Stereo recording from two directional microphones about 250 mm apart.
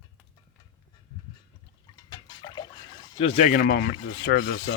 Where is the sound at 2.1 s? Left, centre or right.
Centre; by 3.9 s left.